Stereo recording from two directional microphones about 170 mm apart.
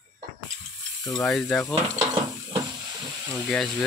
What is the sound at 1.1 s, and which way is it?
Speech, 5° left (ahead or behind).